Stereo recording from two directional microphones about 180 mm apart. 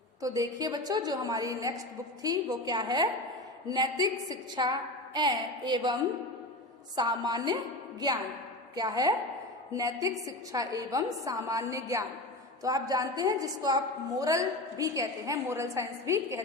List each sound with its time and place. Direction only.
0.2 s a woman's voice: 20° right (ahead or behind)